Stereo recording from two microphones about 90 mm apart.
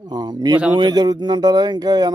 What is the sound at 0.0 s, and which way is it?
Speech, 50° right (ahead or behind).